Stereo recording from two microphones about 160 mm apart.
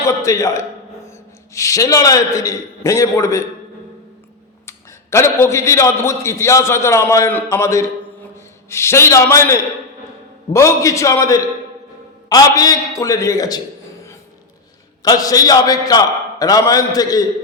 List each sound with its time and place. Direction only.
0.0 s a man's voice: 20° left (ahead or behind)
4.6 s a man's voice: 15° left (ahead or behind)
15.0 s a man's voice: 25° left (ahead or behind)